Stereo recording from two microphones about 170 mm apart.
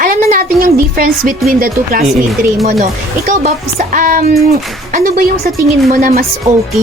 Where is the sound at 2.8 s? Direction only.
40° right (ahead or behind).